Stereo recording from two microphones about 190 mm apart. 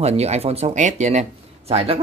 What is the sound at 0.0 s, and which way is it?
Speech, 35° right (ahead or behind).